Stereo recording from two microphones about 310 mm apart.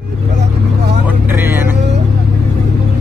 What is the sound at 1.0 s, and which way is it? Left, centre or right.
Vehicle, centre.